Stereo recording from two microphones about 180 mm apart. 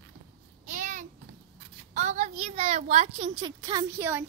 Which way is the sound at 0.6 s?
45° right (ahead or behind).